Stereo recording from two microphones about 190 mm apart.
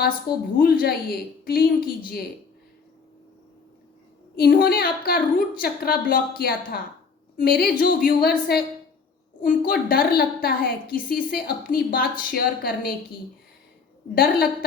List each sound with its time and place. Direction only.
0.6 s a woman's voice: 50° left (ahead or behind)
4.4 s a woman's voice: 55° left (ahead or behind)
14.2 s a woman's voice: 50° left (ahead or behind)